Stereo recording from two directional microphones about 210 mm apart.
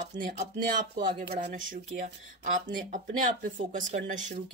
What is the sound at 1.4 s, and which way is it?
Speech, 35° right (ahead or behind).